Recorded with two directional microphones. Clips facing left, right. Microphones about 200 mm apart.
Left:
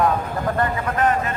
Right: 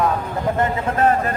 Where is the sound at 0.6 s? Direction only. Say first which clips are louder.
Right 2 dB; 25° right (ahead or behind).